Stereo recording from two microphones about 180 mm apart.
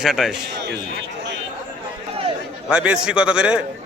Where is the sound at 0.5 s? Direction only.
70° right (ahead or behind).